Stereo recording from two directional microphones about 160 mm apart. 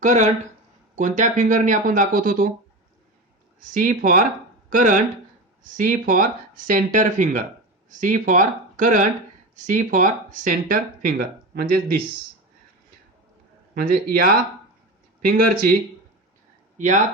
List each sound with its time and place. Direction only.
0.0 s speech: 50° right (ahead or behind)
3.6 s speech: 60° right (ahead or behind)
13.7 s speech: 65° right (ahead or behind)
16.7 s speech: 50° right (ahead or behind)